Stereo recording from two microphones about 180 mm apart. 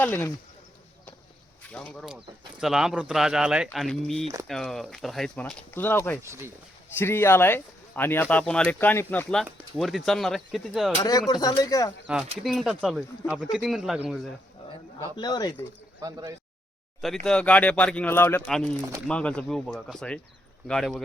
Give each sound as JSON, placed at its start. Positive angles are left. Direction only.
{"t": 0.0, "sound": "speech", "side_deg": 10}
{"t": 1.7, "sound": "speech", "side_deg": 5}
{"t": 6.2, "sound": "speech", "side_deg": -15}
{"t": 7.0, "sound": "speech", "side_deg": 15}
{"t": 9.4, "sound": "speech", "side_deg": 0}
{"t": 11.3, "sound": "speech", "side_deg": 20}
{"t": 12.4, "sound": "speech", "side_deg": 0}
{"t": 15.1, "sound": "speech", "side_deg": 20}
{"t": 16.0, "sound": "speech", "side_deg": -20}
{"t": 17.2, "sound": "speech", "side_deg": 5}